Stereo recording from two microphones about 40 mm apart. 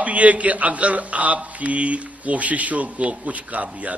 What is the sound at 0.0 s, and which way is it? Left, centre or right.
A man's voice, right.